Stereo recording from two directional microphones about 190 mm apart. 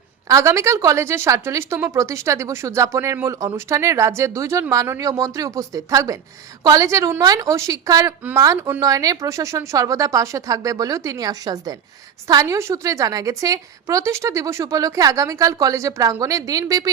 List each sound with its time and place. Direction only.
0.3 s a woman's voice: 15° right (ahead or behind)